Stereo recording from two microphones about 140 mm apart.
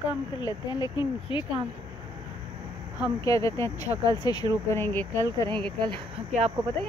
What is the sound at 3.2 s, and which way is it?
Speech, 25° left (ahead or behind).